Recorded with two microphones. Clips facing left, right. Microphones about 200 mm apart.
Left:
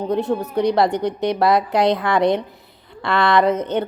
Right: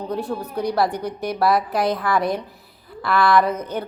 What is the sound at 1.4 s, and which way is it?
A woman's voice, 25° left (ahead or behind).